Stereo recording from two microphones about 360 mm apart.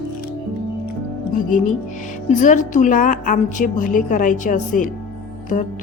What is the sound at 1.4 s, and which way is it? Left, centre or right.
A woman's voice, left.